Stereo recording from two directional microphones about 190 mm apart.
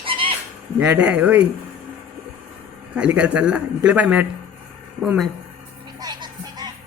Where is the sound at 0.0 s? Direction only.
25° right (ahead or behind).